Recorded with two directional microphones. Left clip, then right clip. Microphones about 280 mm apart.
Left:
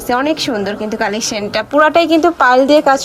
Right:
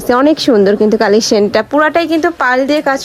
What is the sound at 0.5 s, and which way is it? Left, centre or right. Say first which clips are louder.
Speech: right 9 dB; left.